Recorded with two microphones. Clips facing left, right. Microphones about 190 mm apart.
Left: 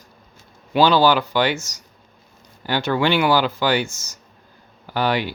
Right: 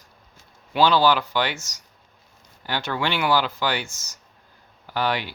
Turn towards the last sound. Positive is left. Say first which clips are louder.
# left 4 dB
turn(degrees=5)  # may be behind; listen again after turning